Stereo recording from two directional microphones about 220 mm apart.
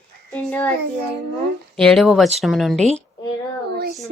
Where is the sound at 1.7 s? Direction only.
Centre (ahead or behind).